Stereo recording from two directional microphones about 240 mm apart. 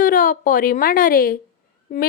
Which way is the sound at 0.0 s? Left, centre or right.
Left.